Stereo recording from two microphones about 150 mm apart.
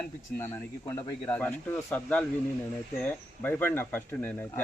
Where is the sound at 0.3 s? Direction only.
15° left (ahead or behind).